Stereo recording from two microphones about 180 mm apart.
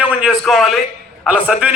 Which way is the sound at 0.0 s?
5° right (ahead or behind).